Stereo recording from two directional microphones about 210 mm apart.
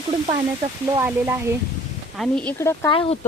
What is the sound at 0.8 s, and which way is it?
Speech, 15° right (ahead or behind).